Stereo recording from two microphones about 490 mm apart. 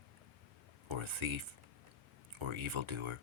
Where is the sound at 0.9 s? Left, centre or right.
Right.